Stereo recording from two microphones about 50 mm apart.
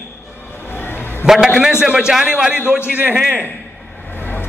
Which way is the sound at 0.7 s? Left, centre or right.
Left.